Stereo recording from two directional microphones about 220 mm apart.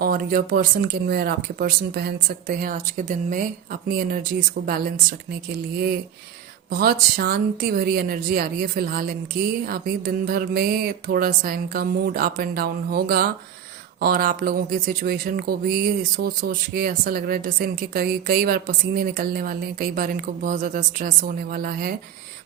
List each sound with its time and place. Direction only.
0.0 s a woman's voice: 40° right (ahead or behind)
6.7 s a woman's voice: 40° right (ahead or behind)